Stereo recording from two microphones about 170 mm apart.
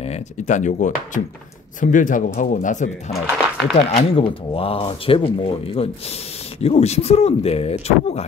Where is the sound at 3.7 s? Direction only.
35° left (ahead or behind).